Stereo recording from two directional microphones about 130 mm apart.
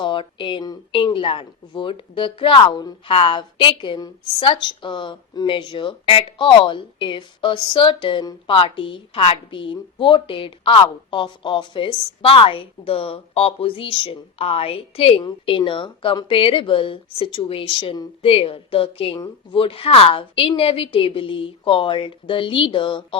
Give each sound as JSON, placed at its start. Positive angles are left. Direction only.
{"t": 0.0, "sound": "a woman's voice", "side_deg": 40}
{"t": 19.1, "sound": "a woman's voice", "side_deg": 30}
{"t": 19.5, "sound": "a woman's voice", "side_deg": 45}